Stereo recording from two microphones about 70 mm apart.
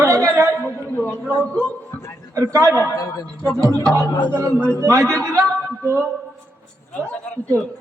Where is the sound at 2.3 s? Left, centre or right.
Right.